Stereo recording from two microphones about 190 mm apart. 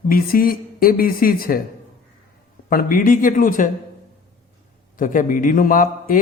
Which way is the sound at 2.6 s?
45° left (ahead or behind).